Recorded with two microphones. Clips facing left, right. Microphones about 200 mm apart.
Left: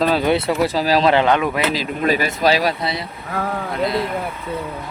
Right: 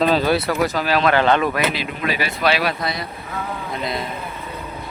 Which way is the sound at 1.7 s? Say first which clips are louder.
Left 5 dB; 40° left (ahead or behind).